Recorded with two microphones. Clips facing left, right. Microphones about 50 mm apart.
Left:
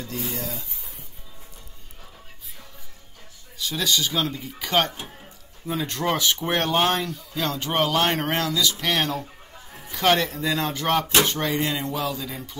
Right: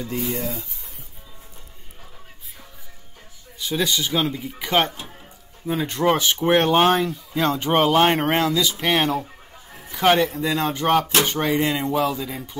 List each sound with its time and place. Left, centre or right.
0.4 s speech: right
3.5 s speech: centre